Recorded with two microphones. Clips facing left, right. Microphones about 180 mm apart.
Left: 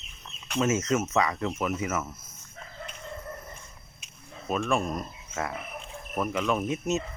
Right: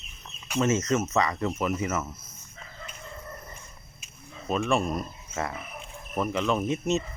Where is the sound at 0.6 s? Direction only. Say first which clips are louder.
Right 1 dB; 5° left (ahead or behind).